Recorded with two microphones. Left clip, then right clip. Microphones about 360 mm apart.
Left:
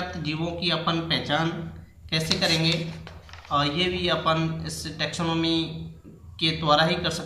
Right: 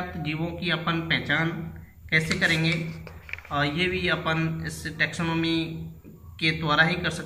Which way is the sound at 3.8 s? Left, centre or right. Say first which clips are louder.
Left 1 dB; centre.